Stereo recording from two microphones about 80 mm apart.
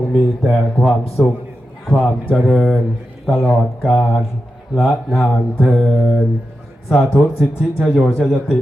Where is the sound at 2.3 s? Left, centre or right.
Centre.